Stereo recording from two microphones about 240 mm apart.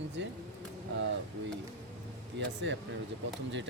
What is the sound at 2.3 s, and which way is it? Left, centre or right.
Speech, right.